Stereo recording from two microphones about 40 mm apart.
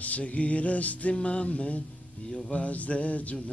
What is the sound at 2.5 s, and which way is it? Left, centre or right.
Mantra, left.